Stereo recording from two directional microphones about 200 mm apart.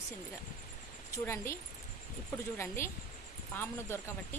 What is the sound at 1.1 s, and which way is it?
Speech, 15° left (ahead or behind).